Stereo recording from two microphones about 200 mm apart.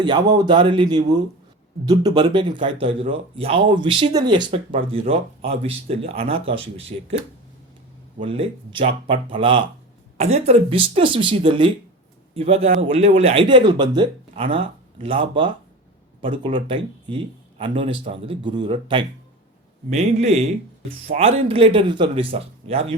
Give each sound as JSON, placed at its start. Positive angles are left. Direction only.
{"t": 0.3, "sound": "speech", "side_deg": -25}
{"t": 8.2, "sound": "a man's voice", "side_deg": -25}